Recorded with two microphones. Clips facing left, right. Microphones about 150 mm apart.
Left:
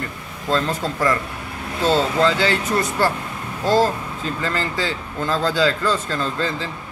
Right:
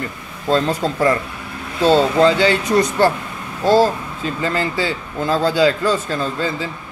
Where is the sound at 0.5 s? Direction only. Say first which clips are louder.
Right 4 dB; 20° right (ahead or behind).